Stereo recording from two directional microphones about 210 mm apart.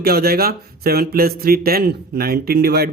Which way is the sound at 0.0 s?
45° right (ahead or behind).